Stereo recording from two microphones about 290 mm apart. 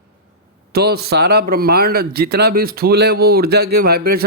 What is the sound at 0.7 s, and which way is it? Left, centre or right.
Speech, right.